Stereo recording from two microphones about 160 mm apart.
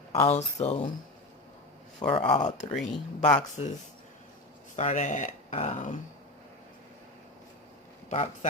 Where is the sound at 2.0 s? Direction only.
30° left (ahead or behind).